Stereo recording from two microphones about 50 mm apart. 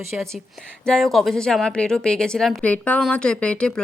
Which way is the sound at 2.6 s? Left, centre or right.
Left.